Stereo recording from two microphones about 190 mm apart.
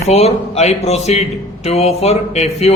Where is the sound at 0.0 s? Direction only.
35° left (ahead or behind).